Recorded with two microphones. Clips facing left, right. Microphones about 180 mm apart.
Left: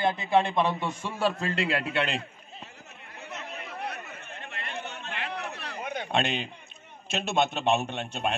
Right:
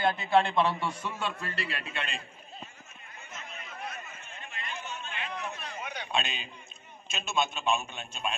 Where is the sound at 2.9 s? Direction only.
70° left (ahead or behind).